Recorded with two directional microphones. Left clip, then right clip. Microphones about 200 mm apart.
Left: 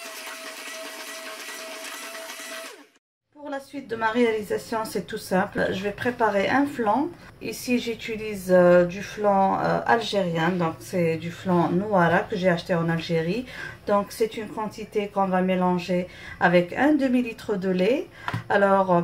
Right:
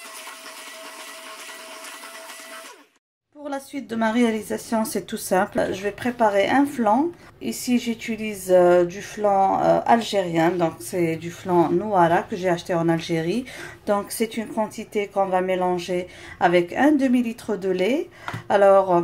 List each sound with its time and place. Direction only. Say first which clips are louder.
3.4 s a woman's voice: right 2 dB; 40° right (ahead or behind)